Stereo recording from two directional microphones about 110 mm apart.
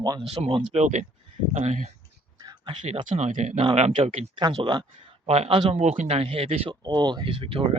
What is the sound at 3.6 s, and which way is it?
Speech, 70° right (ahead or behind).